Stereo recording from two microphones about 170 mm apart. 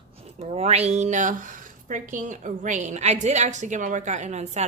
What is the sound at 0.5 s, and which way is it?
A woman's voice, 40° right (ahead or behind).